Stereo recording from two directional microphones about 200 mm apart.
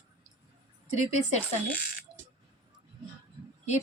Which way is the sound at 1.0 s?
35° left (ahead or behind).